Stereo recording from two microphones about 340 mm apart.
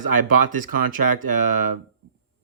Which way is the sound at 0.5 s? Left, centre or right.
Right.